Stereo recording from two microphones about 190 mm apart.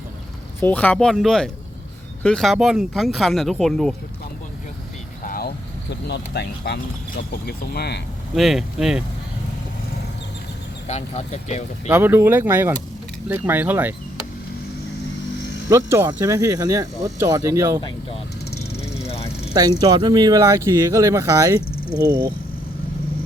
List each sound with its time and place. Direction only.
0.6 s speech: 10° left (ahead or behind)
5.2 s vehicle: 50° left (ahead or behind)
6.1 s speech: 60° left (ahead or behind)
8.4 s speech: centre (ahead or behind)
10.8 s speech: 35° left (ahead or behind)
11.9 s speech: 10° right (ahead or behind)
15.7 s speech: 15° right (ahead or behind)
18.9 s a sound: 30° left (ahead or behind)
19.8 s speech: 20° right (ahead or behind)